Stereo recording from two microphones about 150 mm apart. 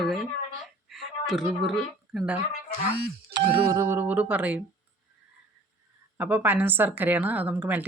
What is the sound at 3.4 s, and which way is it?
Speech, 40° right (ahead or behind).